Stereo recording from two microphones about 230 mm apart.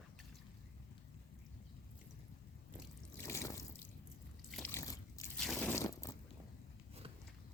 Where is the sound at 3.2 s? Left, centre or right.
Centre.